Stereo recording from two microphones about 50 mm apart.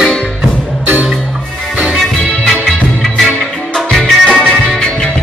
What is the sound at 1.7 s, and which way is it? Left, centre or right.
Music, right.